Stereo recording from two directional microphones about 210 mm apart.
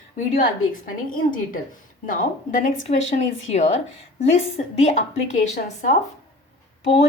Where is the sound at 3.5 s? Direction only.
30° left (ahead or behind).